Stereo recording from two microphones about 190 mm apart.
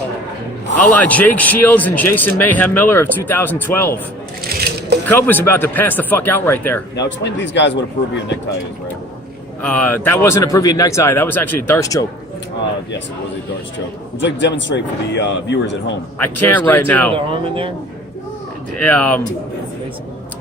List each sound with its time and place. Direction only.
0.8 s a man's voice: 10° left (ahead or behind)
5.0 s a man's voice: 10° left (ahead or behind)
6.9 s a man's voice: 65° left (ahead or behind)
9.6 s a man's voice: 10° left (ahead or behind)
13.7 s a man's voice: 70° left (ahead or behind)
16.1 s a man's voice: 10° left (ahead or behind)
17.2 s speech: 30° right (ahead or behind)
18.8 s a man's voice: 5° left (ahead or behind)